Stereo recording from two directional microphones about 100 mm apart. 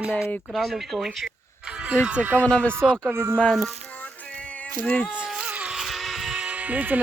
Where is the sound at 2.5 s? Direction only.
10° left (ahead or behind).